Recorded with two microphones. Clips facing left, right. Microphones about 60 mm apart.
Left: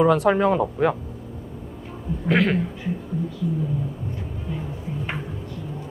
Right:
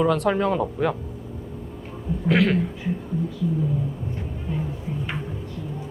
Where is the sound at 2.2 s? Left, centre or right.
Centre.